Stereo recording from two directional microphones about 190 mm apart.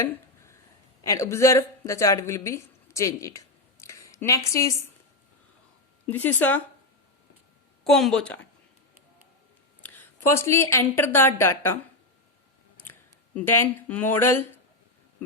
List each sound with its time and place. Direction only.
0.0 s a sound: 15° left (ahead or behind)
1.0 s speech: 15° left (ahead or behind)
6.1 s a woman's voice: 10° left (ahead or behind)
7.9 s a woman's voice: centre (ahead or behind)
10.3 s a woman's voice: 15° left (ahead or behind)
12.8 s speech: 10° left (ahead or behind)